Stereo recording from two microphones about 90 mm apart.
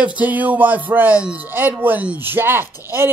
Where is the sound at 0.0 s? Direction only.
15° right (ahead or behind).